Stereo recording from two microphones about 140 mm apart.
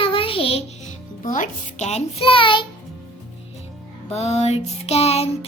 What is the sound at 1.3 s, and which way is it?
Child singing, 60° left (ahead or behind).